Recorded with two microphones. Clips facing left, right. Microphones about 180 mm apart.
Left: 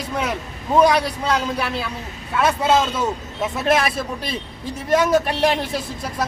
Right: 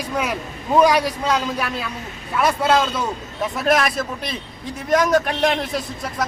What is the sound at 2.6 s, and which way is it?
Speech, 25° left (ahead or behind).